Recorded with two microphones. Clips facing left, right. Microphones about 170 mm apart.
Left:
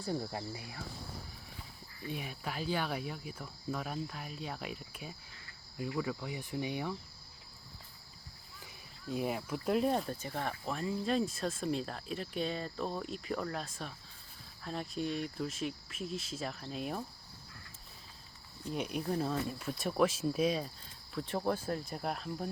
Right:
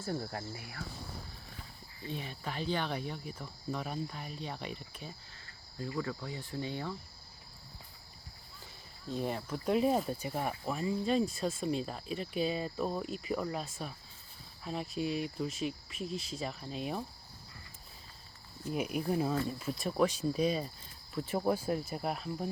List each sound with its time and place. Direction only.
0.3 s speech: 20° left (ahead or behind)
2.0 s speech: 10° left (ahead or behind)
5.7 s cricket: 10° left (ahead or behind)
9.0 s speech: 5° left (ahead or behind)
18.6 s speech: 5° right (ahead or behind)